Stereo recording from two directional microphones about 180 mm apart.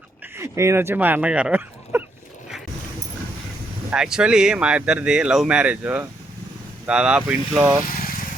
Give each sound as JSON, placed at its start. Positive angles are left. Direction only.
{"t": 0.3, "sound": "speech", "side_deg": -15}
{"t": 3.8, "sound": "speech", "side_deg": -5}